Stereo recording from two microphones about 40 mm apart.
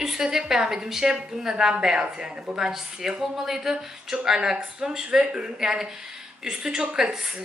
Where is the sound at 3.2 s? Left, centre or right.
Centre.